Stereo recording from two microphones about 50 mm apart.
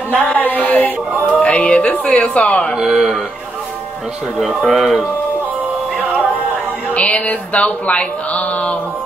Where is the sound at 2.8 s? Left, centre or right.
Centre.